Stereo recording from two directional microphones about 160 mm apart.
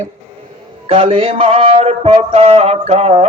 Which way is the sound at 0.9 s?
35° right (ahead or behind).